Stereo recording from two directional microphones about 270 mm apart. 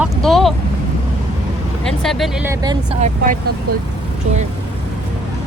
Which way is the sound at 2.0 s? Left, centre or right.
Centre.